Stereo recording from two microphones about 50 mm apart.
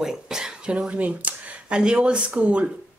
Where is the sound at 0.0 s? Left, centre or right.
Centre; by 1.8 s right.